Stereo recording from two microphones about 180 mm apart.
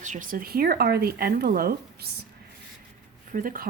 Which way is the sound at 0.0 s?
45° right (ahead or behind).